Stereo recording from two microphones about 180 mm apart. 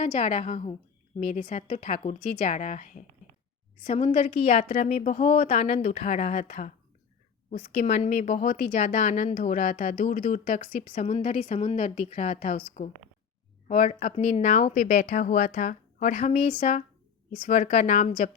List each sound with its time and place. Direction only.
0.0 s speech: 30° left (ahead or behind)